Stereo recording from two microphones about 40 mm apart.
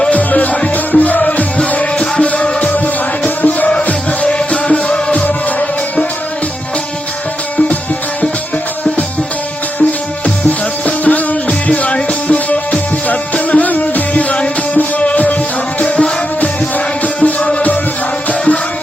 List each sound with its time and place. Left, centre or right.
0.1 s music: left
1.5 s music: left
4.3 s music: left
10.8 s music: left
15.8 s music: left
16.7 s music: left